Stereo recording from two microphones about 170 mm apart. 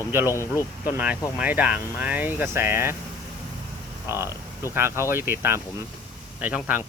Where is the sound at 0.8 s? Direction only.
10° right (ahead or behind).